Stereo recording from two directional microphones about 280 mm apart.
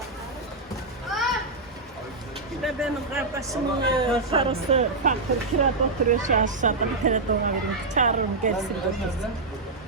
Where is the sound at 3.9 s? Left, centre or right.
Centre.